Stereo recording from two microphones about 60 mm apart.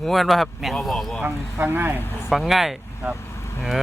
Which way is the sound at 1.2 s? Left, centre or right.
Right.